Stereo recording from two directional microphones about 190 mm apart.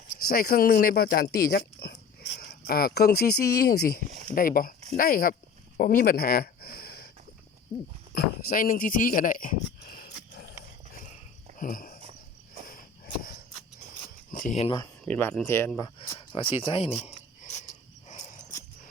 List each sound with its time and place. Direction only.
0.3 s speech: 50° left (ahead or behind)
5.7 s a sound: 45° left (ahead or behind)
8.1 s speech: 50° left (ahead or behind)
11.6 s a sound: 45° left (ahead or behind)
14.3 s speech: 40° left (ahead or behind)
15.0 s speech: 10° left (ahead or behind)
16.0 s speech: 25° left (ahead or behind)
17.1 s cricket: 40° left (ahead or behind)